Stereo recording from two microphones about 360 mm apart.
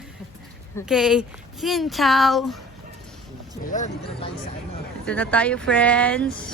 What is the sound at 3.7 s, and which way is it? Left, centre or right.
Speech, centre.